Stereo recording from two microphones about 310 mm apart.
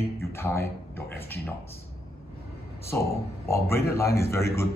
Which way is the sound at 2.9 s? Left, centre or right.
Centre.